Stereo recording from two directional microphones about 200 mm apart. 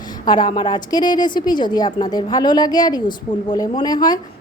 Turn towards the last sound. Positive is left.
turn(degrees=20)  # may be behind; listen again after turning